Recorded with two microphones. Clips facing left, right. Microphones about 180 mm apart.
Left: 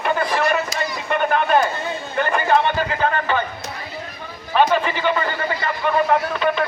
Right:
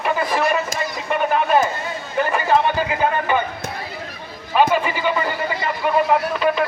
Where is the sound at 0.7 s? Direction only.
50° right (ahead or behind).